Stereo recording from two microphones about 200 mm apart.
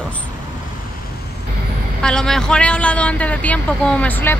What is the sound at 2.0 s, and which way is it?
Speech, 5° left (ahead or behind).